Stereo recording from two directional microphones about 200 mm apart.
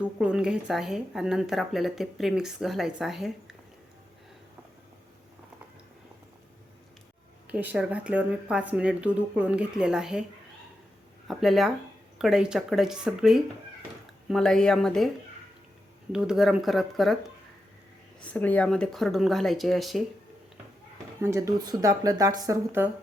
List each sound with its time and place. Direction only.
0.0 s speech: 5° right (ahead or behind)
7.4 s speech: 5° right (ahead or behind)
11.3 s speech: centre (ahead or behind)
16.1 s speech: 5° right (ahead or behind)
18.2 s speech: 10° left (ahead or behind)
21.2 s speech: 15° right (ahead or behind)